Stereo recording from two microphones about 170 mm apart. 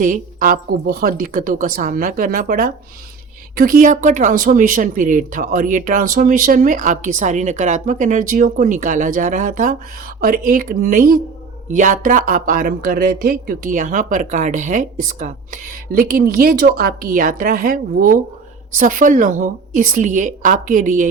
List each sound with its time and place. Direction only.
0.0 s a woman's voice: 50° right (ahead or behind)